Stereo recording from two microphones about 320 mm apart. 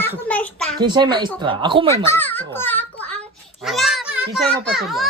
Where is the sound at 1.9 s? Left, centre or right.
Centre.